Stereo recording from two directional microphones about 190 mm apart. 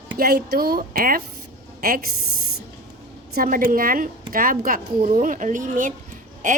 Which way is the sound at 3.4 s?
50° right (ahead or behind).